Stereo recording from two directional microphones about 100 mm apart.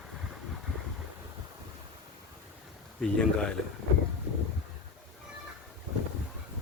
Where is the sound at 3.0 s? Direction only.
5° left (ahead or behind).